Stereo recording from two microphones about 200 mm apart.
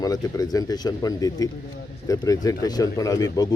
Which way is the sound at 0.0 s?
20° left (ahead or behind).